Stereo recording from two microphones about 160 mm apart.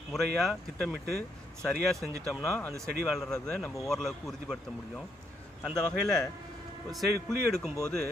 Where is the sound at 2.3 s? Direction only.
15° left (ahead or behind).